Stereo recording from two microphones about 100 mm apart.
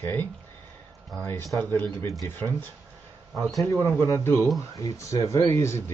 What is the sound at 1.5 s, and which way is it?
Speech, 15° left (ahead or behind).